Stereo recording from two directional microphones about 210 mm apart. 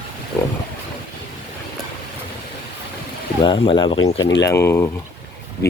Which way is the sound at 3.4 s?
25° left (ahead or behind).